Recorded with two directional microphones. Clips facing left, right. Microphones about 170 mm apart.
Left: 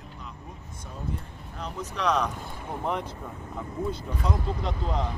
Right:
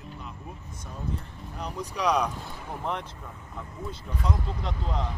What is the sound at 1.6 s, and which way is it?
Speech, 10° right (ahead or behind).